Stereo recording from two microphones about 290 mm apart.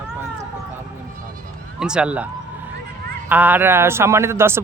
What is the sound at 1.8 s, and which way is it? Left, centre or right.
Speech, centre.